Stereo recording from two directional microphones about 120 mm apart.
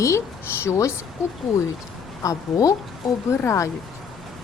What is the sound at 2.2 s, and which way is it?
Speech, 30° left (ahead or behind).